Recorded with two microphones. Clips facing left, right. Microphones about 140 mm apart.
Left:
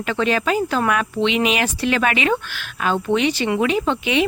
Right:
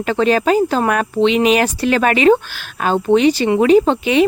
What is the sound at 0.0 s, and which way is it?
Speech, 40° right (ahead or behind).